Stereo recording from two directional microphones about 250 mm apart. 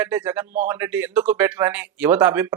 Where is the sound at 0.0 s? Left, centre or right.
Centre.